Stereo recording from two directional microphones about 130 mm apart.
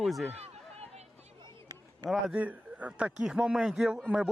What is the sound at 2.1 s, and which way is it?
Speech, 10° right (ahead or behind).